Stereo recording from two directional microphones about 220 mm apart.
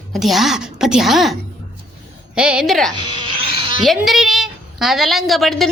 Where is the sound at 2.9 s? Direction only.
20° right (ahead or behind).